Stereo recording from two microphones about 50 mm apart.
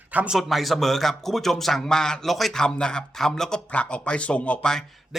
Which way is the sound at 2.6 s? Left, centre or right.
Centre.